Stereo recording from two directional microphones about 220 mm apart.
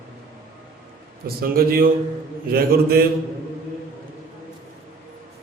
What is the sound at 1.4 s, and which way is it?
A man's voice, 45° right (ahead or behind).